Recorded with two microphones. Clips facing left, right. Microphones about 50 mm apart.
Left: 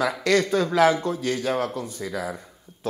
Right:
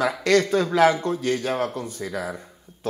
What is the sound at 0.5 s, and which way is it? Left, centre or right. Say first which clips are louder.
Speech: right 1 dB; centre.